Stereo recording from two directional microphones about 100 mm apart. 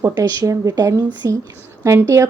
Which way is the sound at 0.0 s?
40° right (ahead or behind).